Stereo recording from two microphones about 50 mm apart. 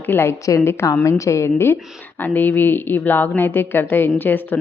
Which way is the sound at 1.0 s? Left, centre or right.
Left.